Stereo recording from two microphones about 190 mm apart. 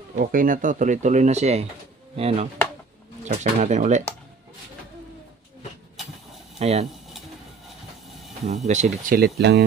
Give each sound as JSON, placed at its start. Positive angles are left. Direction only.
{"t": 0.1, "sound": "speech", "side_deg": -45}
{"t": 6.6, "sound": "speech", "side_deg": -35}
{"t": 8.6, "sound": "speech", "side_deg": -35}
{"t": 9.4, "sound": "speech", "side_deg": -60}